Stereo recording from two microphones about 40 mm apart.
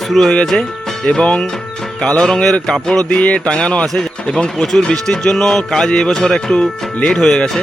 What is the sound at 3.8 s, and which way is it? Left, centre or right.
Speech, centre.